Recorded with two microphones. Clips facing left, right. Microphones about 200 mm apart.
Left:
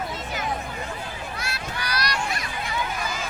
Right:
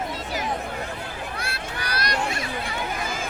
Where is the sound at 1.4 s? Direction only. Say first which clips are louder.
Even; 55° right (ahead or behind).